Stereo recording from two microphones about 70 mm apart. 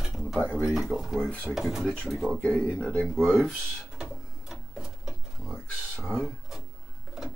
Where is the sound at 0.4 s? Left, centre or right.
Centre.